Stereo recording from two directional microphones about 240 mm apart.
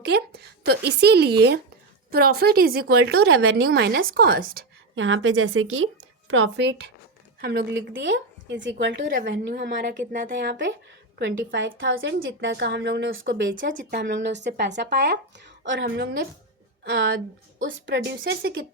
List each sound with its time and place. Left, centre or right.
0.0 s speech: right
3.2 s speech: right
3.6 s speech: right
4.9 s speech: right
10.1 s speech: right
13.2 s speech: right